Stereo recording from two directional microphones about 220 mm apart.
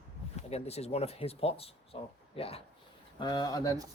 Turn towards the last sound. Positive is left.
turn(degrees=15)  # may be behind; listen again after turning